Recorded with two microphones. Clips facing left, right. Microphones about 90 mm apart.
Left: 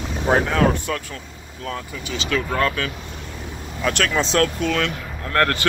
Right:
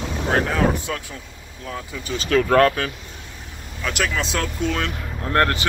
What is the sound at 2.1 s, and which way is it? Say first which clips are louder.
Speech: right 6 dB; 45° right (ahead or behind).